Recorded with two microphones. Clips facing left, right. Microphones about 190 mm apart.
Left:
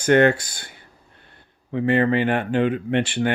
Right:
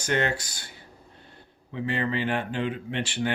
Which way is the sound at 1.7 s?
60° left (ahead or behind).